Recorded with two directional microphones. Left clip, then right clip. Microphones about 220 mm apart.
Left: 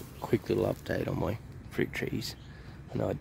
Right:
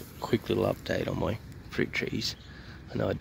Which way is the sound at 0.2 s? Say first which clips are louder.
Right 1 dB; 5° left (ahead or behind).